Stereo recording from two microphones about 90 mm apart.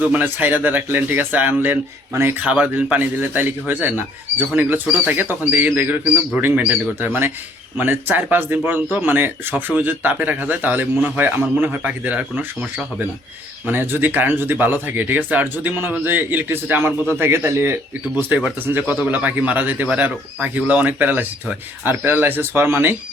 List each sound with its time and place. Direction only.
0.0 s speech: 20° right (ahead or behind)
2.4 s speech: 15° right (ahead or behind); by 17.7 s 30° right (ahead or behind)
18.1 s speech: 20° right (ahead or behind)